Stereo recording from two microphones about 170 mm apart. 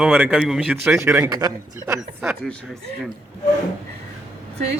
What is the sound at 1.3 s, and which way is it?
Speech, 20° right (ahead or behind).